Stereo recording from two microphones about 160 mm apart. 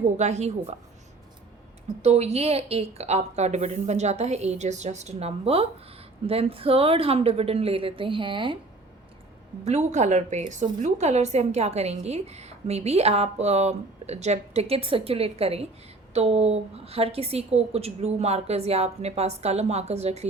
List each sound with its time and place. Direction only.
0.2 s a woman's voice: 45° right (ahead or behind)
2.0 s a woman's voice: 45° right (ahead or behind)
9.6 s a woman's voice: 45° right (ahead or behind)